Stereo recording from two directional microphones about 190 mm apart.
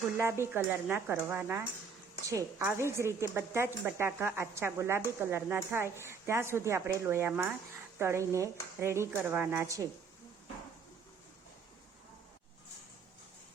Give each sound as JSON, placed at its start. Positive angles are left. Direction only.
{"t": 0.2, "sound": "a woman's voice", "side_deg": -15}